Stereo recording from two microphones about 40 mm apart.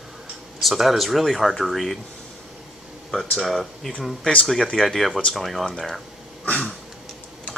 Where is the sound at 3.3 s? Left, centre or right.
Centre.